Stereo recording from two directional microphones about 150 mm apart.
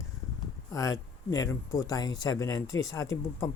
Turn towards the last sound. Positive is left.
turn(degrees=20)  # may be behind; listen again after turning